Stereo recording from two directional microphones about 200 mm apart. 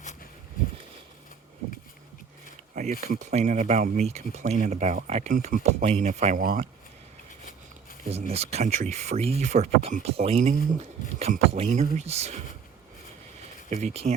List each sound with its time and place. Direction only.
2.7 s speech: 40° right (ahead or behind)
8.1 s speech: 30° right (ahead or behind)
13.7 s speech: 35° right (ahead or behind)